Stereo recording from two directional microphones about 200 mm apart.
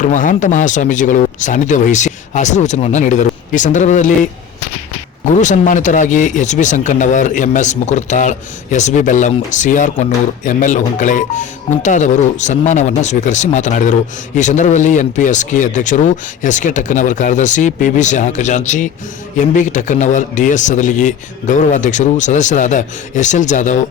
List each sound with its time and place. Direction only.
0.0 s speech: 40° left (ahead or behind)